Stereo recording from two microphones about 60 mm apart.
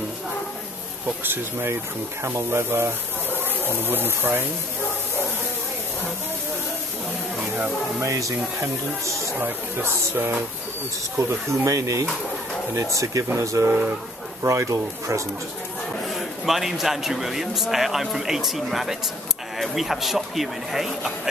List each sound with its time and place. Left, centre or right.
1.0 s speech: right
8.0 s speech: right
9.8 s speech: right
11.1 s speech: right
16.1 s a man's voice: centre